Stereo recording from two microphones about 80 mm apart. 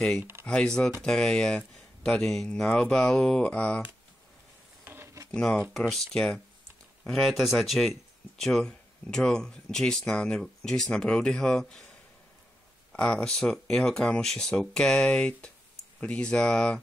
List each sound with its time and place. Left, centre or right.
0.5 s speech: centre
4.8 s a sound: right
5.3 s speech: centre
12.9 s speech: centre